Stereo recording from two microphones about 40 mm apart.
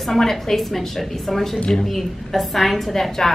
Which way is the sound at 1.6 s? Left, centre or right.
Centre.